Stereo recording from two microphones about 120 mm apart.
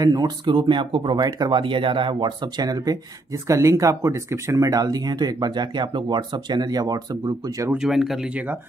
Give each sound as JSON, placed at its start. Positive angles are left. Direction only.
{"t": 0.0, "sound": "speech", "side_deg": -35}
{"t": 7.7, "sound": "speech", "side_deg": -5}